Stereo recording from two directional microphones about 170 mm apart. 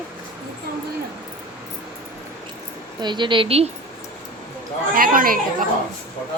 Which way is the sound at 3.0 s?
25° right (ahead or behind).